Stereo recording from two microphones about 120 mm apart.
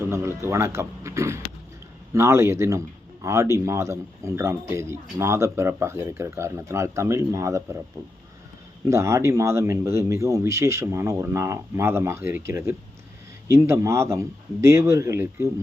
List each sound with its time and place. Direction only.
0.0 s speech: 20° right (ahead or behind)
8.9 s speech: 25° right (ahead or behind)